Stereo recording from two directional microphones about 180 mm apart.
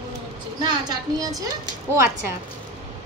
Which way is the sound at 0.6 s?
25° right (ahead or behind).